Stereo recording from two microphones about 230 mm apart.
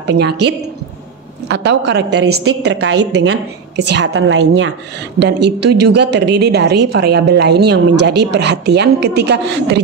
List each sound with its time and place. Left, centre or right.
0.0 s a woman's voice: right
2.9 s a woman's voice: right
3.2 s a woman's voice: right
5.2 s a woman's voice: right